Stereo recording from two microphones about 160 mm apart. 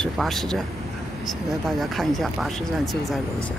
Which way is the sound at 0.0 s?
Centre (ahead or behind).